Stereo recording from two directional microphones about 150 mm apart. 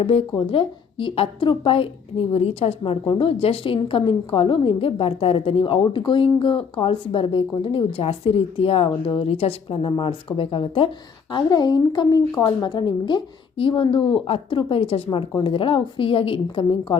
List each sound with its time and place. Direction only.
0.0 s a woman's voice: 40° left (ahead or behind)